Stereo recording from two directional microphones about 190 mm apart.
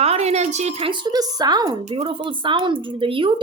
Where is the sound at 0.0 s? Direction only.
35° right (ahead or behind).